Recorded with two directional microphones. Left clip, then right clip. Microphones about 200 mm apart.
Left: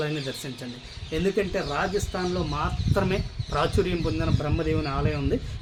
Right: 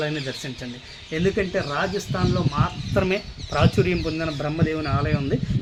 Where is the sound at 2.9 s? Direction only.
30° right (ahead or behind).